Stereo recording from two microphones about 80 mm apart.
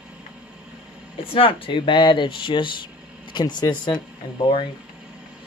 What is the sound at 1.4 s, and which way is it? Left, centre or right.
Speech, left.